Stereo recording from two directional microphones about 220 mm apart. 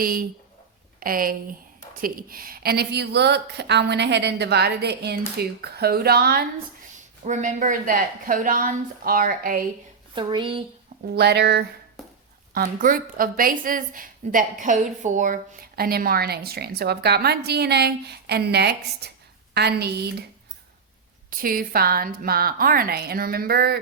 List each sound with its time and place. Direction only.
0.0 s a woman's voice: 40° right (ahead or behind)
6.9 s a woman's voice: 35° right (ahead or behind)
10.2 s a woman's voice: 20° right (ahead or behind)
11.1 s a woman's voice: 50° right (ahead or behind)
12.0 s a sound: centre (ahead or behind)
12.5 s a woman's voice: 40° right (ahead or behind)
21.2 s a woman's voice: 40° right (ahead or behind)